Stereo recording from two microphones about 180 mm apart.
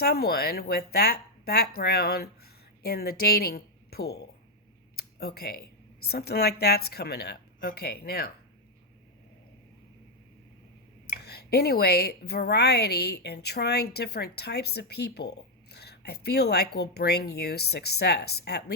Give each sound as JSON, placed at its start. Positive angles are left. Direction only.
{"t": 0.0, "sound": "speech", "side_deg": 60}
{"t": 4.9, "sound": "a sound", "side_deg": 60}
{"t": 6.1, "sound": "speech", "side_deg": 60}
{"t": 11.0, "sound": "speech", "side_deg": 65}